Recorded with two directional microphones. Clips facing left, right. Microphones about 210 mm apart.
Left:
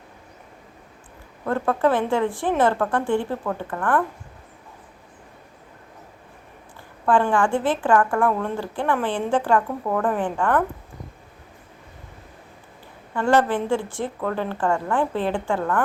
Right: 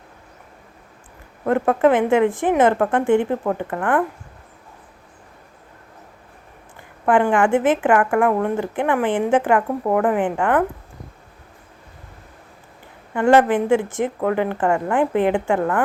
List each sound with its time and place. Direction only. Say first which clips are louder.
1.5 s speech: right 5 dB; 20° right (ahead or behind)
7.0 s a woman's voice: right 3 dB; 20° right (ahead or behind)
13.1 s a woman's voice: right 5 dB; 15° right (ahead or behind)